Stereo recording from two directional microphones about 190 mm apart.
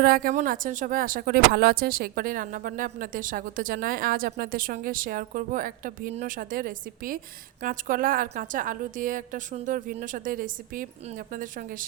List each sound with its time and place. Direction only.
0.0 s speech: 50° right (ahead or behind)